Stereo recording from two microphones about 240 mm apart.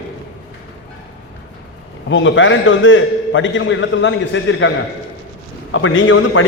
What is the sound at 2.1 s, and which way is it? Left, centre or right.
A man's voice, left.